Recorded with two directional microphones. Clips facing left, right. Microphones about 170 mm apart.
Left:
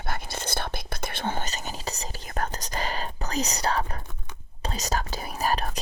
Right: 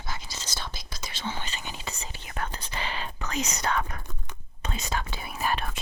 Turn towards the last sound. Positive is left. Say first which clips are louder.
# left 3 dB
turn(degrees=40)  # may be behind; listen again after turning